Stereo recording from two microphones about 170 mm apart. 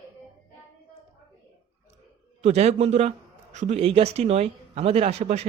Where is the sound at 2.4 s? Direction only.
40° right (ahead or behind).